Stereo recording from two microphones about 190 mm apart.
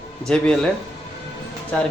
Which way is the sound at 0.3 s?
5° left (ahead or behind).